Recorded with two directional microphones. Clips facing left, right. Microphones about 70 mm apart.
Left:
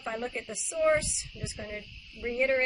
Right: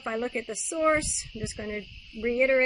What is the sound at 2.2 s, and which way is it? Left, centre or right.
Speech, right.